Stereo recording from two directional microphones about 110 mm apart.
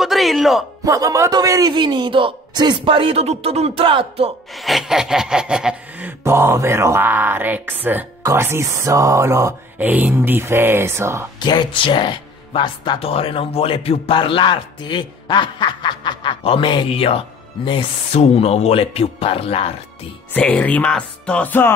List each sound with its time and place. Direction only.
0.0 s speech: centre (ahead or behind)
0.8 s a man's voice: 30° right (ahead or behind); by 4.3 s 55° right (ahead or behind)
4.6 s a sound: centre (ahead or behind); by 8.3 s 15° right (ahead or behind)
8.3 s speech: 25° right (ahead or behind)
9.8 s speech: 15° right (ahead or behind)
11.3 s speech: 40° left (ahead or behind)
13.0 s speech: 60° left (ahead or behind)
18.1 s speech: 70° left (ahead or behind)
20.3 s speech: 10° left (ahead or behind)